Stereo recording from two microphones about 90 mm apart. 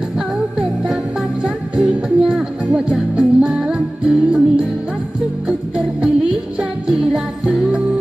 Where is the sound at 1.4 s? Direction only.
5° right (ahead or behind).